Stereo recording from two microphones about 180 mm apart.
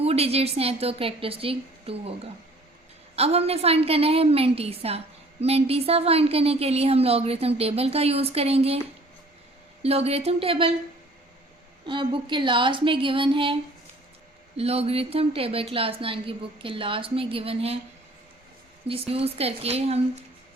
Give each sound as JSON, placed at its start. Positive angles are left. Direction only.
{"t": 0.0, "sound": "a woman's voice", "side_deg": -35}
{"t": 9.8, "sound": "a woman's voice", "side_deg": -35}
{"t": 11.9, "sound": "a woman's voice", "side_deg": -25}
{"t": 18.9, "sound": "a woman's voice", "side_deg": -30}